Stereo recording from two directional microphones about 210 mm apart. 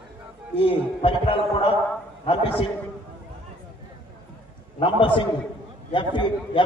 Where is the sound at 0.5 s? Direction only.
25° left (ahead or behind).